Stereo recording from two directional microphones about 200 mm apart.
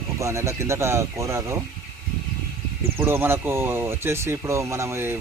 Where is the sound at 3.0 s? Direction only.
10° right (ahead or behind).